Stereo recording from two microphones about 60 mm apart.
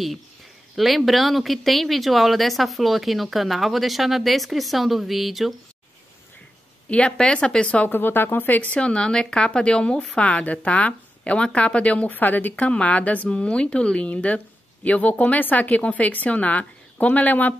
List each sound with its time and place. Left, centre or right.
0.7 s speech: centre
6.9 s speech: centre
7.9 s a woman's voice: left